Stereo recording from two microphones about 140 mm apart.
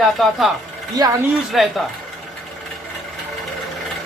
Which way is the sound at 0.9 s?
25° right (ahead or behind).